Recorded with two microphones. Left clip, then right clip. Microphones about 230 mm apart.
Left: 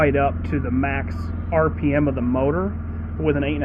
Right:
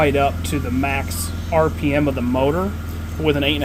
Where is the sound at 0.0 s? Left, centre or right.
Right.